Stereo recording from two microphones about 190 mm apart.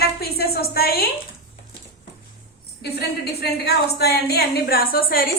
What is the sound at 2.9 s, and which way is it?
A woman's voice, 60° left (ahead or behind).